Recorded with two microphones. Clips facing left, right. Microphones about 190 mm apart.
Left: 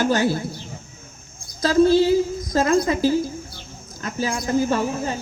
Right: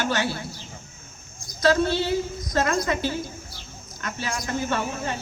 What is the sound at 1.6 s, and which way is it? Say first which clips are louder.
Speech: left 6 dB; 40° left (ahead or behind).